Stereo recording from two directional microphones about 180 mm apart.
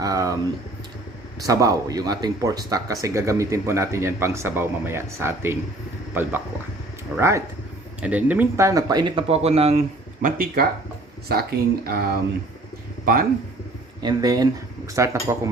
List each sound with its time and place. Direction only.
0.0 s a sound: 20° right (ahead or behind)
1.4 s speech: 20° right (ahead or behind); by 9.8 s 35° right (ahead or behind)
10.2 s speech: 50° right (ahead or behind)
14.0 s speech: 20° right (ahead or behind)